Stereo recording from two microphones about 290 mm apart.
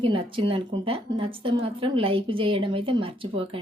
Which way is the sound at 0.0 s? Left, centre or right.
Centre.